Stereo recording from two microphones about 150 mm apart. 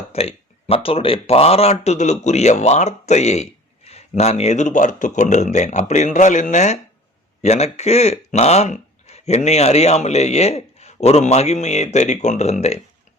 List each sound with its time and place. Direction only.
0.1 s speech: 40° left (ahead or behind)